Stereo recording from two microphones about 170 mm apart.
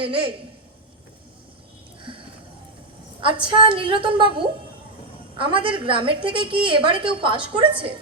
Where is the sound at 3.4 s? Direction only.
30° right (ahead or behind).